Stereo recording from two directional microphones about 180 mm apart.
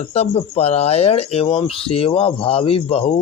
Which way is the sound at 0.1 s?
35° left (ahead or behind).